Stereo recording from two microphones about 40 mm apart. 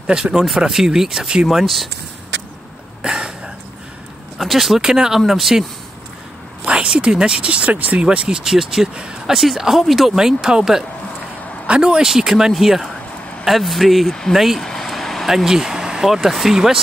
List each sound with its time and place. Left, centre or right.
0.0 s speech: right
1.6 s speech: centre
3.0 s a sound: centre
4.4 s speech: centre
6.6 s speech: right
7.7 s speech: right
8.0 s speech: right
8.5 s speech: centre
10.1 s speech: centre
11.8 s speech: centre
14.6 s a sound: centre
15.2 s speech: centre